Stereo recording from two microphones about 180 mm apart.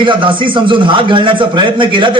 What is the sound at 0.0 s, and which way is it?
A man's voice, 25° right (ahead or behind).